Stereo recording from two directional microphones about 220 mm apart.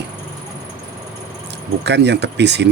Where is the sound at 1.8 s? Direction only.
50° right (ahead or behind).